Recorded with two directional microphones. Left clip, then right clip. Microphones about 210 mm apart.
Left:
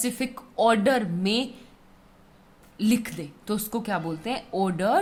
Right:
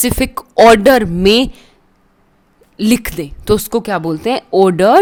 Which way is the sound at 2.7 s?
45° right (ahead or behind).